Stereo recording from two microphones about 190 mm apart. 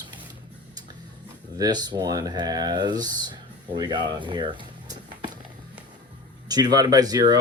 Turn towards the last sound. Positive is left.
turn(degrees=-20)  # may be behind; listen again after turning